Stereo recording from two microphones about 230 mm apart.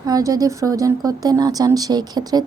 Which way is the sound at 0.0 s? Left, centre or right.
Centre.